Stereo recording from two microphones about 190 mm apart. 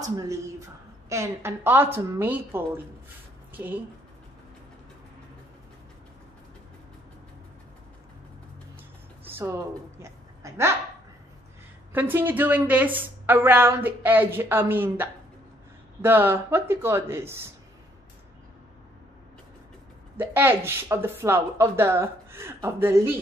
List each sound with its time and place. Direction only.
0.0 s a woman's voice: 20° right (ahead or behind)
9.2 s a sound: 15° right (ahead or behind)
11.9 s a woman's voice: 10° right (ahead or behind)
20.2 s a woman's voice: 10° right (ahead or behind)